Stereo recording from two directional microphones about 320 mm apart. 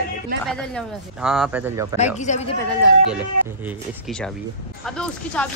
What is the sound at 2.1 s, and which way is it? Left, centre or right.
Speech, left.